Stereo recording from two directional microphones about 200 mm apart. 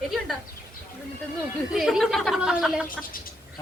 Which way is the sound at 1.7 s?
Centre (ahead or behind).